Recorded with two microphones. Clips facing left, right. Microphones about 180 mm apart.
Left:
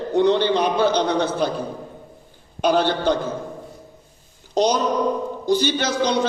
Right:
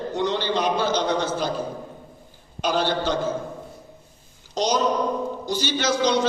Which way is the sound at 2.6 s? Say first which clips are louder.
Left 4 dB; 60° left (ahead or behind).